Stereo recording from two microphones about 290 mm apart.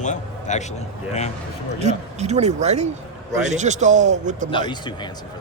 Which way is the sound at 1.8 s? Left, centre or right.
Right.